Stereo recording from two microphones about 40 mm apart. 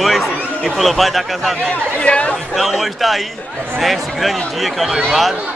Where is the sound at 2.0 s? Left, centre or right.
Left.